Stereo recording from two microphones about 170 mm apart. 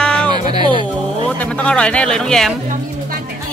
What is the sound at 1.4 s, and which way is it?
Speech, 5° left (ahead or behind).